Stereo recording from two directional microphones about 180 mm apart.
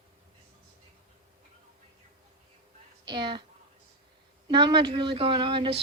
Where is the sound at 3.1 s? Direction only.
25° right (ahead or behind).